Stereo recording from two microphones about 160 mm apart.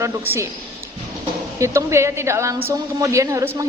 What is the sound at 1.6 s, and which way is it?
A woman's voice, 20° right (ahead or behind).